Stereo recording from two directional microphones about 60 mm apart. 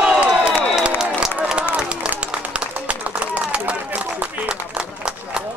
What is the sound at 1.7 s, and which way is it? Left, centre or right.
Applause, right.